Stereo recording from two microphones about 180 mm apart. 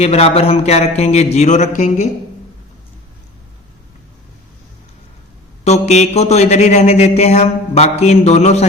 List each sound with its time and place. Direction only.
0.0 s mantra: 35° left (ahead or behind)
5.6 s mantra: 40° left (ahead or behind)